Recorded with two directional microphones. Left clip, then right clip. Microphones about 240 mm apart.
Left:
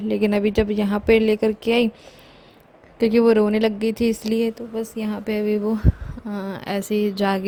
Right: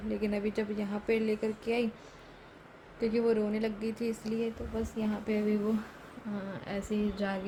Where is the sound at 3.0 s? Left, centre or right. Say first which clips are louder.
Left 13 dB; left.